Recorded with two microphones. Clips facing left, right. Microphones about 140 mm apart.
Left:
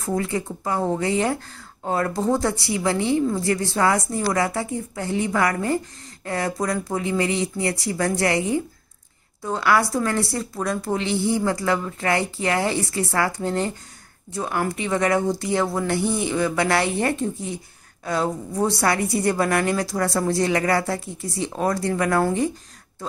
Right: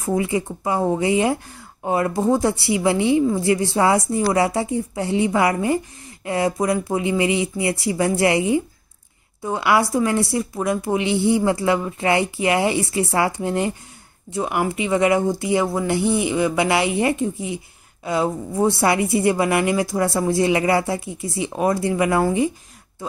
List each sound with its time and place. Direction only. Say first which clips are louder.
0.0 s a woman's voice: right 3 dB; 15° right (ahead or behind)